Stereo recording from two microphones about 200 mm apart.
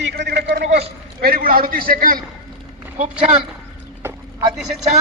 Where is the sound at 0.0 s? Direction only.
55° right (ahead or behind).